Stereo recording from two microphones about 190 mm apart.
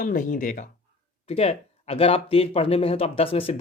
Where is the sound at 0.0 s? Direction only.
45° left (ahead or behind).